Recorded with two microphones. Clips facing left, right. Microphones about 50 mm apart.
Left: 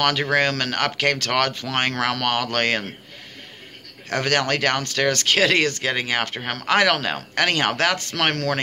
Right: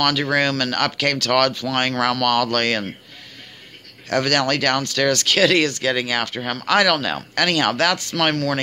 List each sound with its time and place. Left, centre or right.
0.0 s speech: left
4.1 s speech: left